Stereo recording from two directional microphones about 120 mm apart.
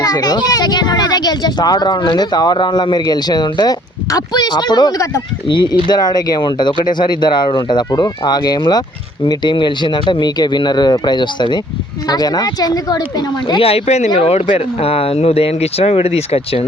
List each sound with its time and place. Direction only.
0.0 s speech: 30° left (ahead or behind)
5.5 s speech: 40° left (ahead or behind)
13.6 s speech: 55° left (ahead or behind)